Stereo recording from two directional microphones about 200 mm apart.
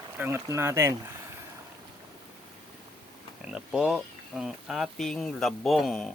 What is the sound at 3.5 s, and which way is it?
Speech, 5° right (ahead or behind).